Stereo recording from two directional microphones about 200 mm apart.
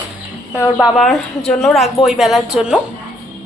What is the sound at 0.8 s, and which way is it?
A woman's voice, centre (ahead or behind).